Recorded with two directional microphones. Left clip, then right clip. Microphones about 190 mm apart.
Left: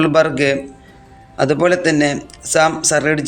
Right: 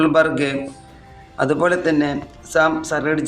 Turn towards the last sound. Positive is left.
turn(degrees=55)  # may be behind; listen again after turning